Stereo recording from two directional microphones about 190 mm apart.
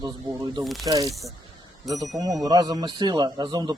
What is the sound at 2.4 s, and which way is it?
Speech, 20° right (ahead or behind).